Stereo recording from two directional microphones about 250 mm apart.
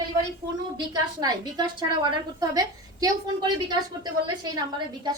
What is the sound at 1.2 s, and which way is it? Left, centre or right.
A woman's voice, centre.